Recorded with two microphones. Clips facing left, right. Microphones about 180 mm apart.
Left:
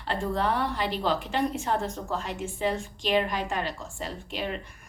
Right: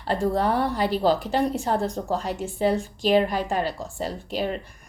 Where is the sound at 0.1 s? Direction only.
40° right (ahead or behind).